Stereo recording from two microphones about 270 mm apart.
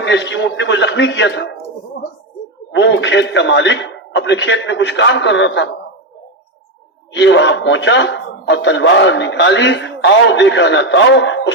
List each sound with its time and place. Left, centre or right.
0.0 s speech: left
2.7 s speech: left
7.1 s speech: left